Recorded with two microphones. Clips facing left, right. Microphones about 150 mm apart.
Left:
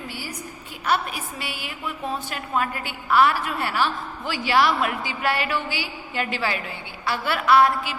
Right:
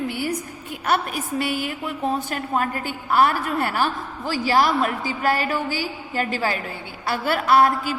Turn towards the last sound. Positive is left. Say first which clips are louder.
# right 1 dB
turn(degrees=-45)  # may be behind; listen again after turning